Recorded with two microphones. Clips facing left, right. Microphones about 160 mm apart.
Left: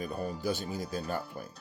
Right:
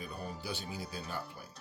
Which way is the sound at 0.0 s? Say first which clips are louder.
Left 8 dB; 45° left (ahead or behind).